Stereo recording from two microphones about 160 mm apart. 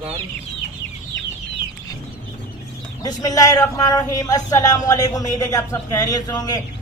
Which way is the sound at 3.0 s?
25° left (ahead or behind).